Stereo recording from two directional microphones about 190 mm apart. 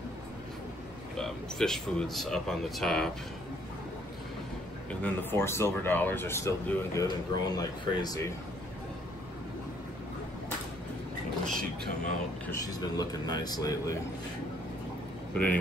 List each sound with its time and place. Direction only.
1.1 s speech: 5° left (ahead or behind)
5.0 s speech: 15° left (ahead or behind)
11.4 s speech: 45° right (ahead or behind)
12.4 s speech: 20° left (ahead or behind)
15.3 s speech: 10° left (ahead or behind)